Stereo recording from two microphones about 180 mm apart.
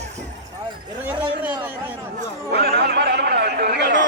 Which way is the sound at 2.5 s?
60° right (ahead or behind).